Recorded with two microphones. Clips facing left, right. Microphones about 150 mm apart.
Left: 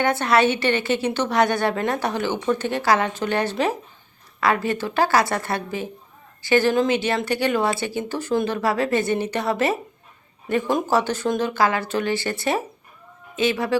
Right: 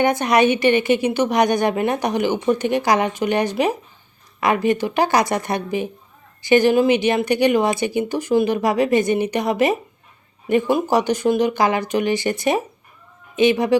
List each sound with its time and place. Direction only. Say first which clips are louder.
0.0 s a woman's voice: right 3 dB; 15° right (ahead or behind)